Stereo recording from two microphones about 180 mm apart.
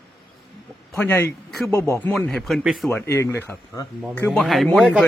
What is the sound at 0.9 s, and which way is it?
Speech, 10° left (ahead or behind).